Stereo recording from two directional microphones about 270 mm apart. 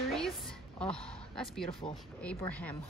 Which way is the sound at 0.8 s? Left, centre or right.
Centre.